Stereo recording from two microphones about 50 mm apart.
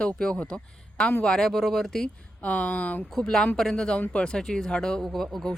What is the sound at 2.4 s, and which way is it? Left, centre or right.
Speech, left.